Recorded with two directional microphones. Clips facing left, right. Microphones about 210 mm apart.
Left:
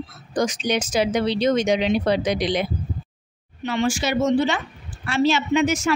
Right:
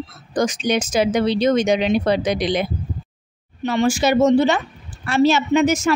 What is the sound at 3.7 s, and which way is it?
Speech, 40° right (ahead or behind).